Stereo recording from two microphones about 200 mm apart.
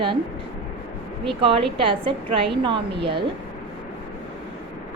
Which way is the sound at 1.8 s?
25° right (ahead or behind).